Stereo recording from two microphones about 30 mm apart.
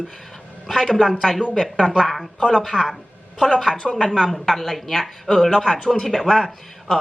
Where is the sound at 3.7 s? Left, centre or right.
Left.